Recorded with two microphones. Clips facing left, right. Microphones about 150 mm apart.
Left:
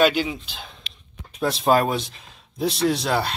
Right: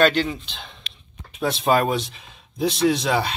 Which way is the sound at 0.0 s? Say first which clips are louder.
Right 1 dB; 5° left (ahead or behind).